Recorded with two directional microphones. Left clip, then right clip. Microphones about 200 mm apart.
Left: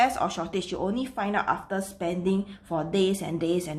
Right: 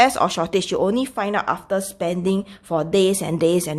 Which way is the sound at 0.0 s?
50° right (ahead or behind).